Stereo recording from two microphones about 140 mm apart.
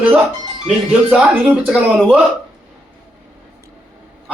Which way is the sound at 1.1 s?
5° right (ahead or behind).